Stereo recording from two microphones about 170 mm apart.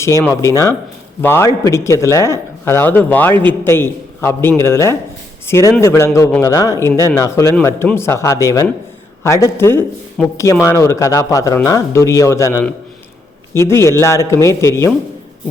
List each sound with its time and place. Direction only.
0.0 s a man's voice: 15° left (ahead or behind)